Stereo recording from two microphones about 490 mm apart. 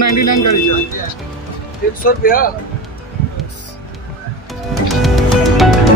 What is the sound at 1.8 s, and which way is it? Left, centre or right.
Speech, centre.